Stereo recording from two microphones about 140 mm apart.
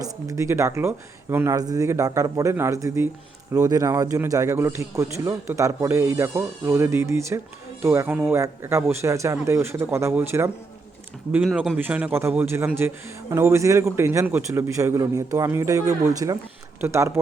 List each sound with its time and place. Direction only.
0.0 s a man's voice: 20° right (ahead or behind)